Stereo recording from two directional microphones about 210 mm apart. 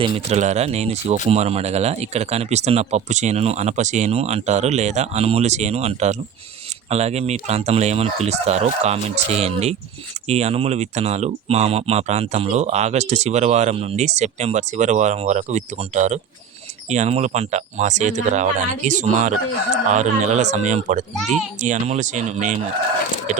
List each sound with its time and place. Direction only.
0.0 s speech: 25° right (ahead or behind)